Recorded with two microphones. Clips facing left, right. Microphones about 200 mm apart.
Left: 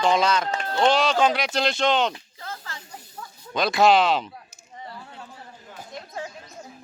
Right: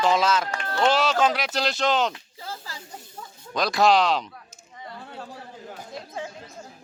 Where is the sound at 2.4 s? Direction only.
5° right (ahead or behind).